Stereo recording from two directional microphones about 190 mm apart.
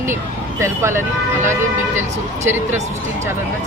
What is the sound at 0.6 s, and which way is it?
Speech, 15° right (ahead or behind).